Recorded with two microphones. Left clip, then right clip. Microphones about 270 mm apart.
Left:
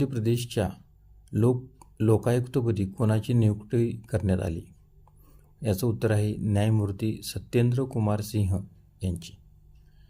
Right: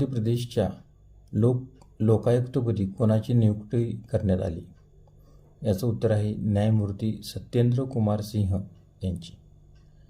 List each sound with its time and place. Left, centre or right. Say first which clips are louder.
0.0 s speech: left 1 dB; left
5.6 s speech: right 2 dB; left